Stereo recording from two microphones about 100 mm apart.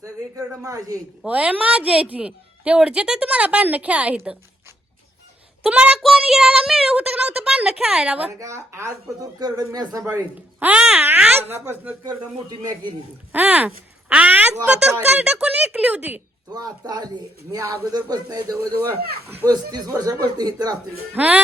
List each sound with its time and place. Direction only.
0.6 s speech: 35° right (ahead or behind)
1.2 s a woman's voice: 15° right (ahead or behind)
5.6 s a woman's voice: 10° right (ahead or behind)
8.4 s speech: 30° right (ahead or behind)
10.6 s a woman's voice: 10° right (ahead or behind)
11.3 s speech: 25° right (ahead or behind)
12.5 s speech: 40° right (ahead or behind)
13.3 s a woman's voice: 15° right (ahead or behind)
16.5 s speech: 40° right (ahead or behind)
18.9 s speech: 20° right (ahead or behind)
19.5 s speech: 40° right (ahead or behind)
21.1 s a woman's voice: 15° right (ahead or behind)